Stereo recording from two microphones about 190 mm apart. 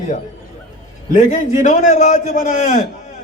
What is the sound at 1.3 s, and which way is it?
A man's voice, 40° left (ahead or behind).